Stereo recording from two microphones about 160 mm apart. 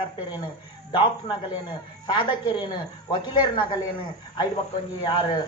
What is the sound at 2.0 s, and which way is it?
Speech, 30° left (ahead or behind).